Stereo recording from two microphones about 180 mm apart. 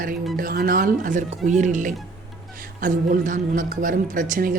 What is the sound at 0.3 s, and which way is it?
A man's voice, 55° right (ahead or behind).